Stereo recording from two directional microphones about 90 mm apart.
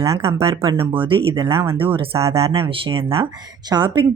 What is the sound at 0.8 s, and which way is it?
Speech, 80° right.